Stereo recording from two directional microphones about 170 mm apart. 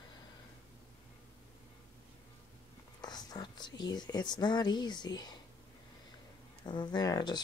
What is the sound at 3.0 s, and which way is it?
Speech, 25° left (ahead or behind).